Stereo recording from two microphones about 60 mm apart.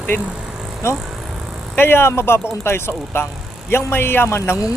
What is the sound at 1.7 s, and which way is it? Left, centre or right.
Speech, left.